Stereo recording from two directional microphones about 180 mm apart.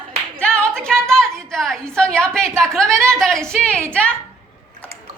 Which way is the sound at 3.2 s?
Centre (ahead or behind).